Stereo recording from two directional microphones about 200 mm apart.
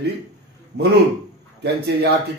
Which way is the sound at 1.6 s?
55° right (ahead or behind).